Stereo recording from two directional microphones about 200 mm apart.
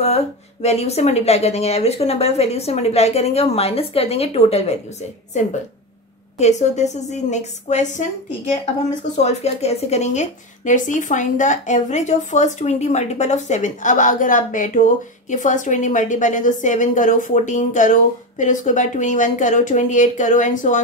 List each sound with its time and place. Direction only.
0.0 s speech: 30° left (ahead or behind)
9.1 s speech: 35° left (ahead or behind)